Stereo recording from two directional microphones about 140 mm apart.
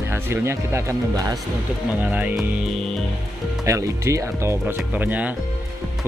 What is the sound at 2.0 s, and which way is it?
Speech, 10° right (ahead or behind).